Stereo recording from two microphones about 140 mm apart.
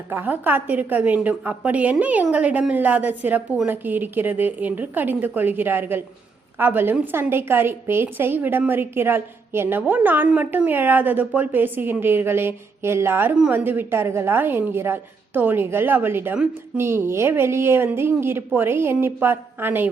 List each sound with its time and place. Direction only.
0.1 s a woman's voice: 15° right (ahead or behind)